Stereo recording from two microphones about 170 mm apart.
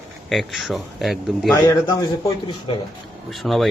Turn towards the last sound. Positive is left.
turn(degrees=5)  # may be behind; listen again after turning